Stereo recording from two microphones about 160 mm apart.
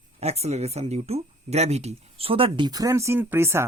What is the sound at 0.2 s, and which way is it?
Speech, 40° right (ahead or behind).